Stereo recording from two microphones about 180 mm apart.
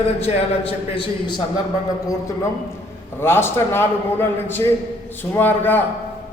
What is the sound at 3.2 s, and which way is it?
A man's voice, 10° left (ahead or behind).